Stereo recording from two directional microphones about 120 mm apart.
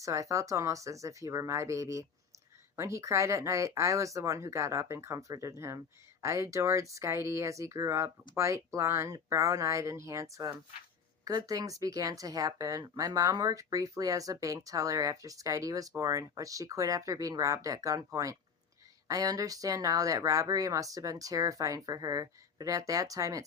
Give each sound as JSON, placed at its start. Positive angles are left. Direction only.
{"t": 0.0, "sound": "speech", "side_deg": -25}